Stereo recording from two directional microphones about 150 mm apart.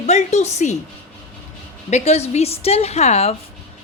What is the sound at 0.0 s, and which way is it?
Speech, 50° left (ahead or behind).